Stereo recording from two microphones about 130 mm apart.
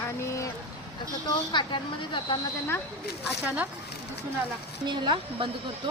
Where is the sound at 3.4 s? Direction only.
15° right (ahead or behind).